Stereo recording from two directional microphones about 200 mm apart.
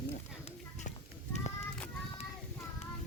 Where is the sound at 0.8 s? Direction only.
35° left (ahead or behind).